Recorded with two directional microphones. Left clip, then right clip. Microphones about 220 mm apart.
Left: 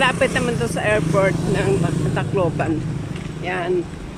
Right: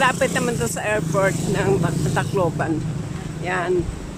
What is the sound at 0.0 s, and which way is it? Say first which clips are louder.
Speech: left 1 dB; centre (ahead or behind).